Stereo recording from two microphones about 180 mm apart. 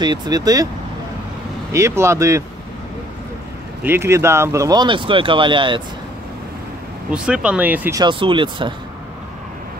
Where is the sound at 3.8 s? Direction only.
15° right (ahead or behind).